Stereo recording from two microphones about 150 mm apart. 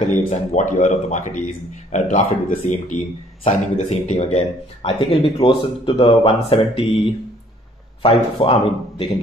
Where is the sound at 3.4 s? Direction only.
45° left (ahead or behind).